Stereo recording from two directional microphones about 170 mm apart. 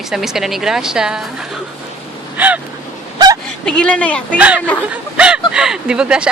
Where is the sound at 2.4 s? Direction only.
10° right (ahead or behind).